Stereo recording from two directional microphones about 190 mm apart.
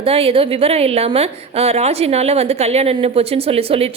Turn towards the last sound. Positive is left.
turn(degrees=-30)  # may be behind; listen again after turning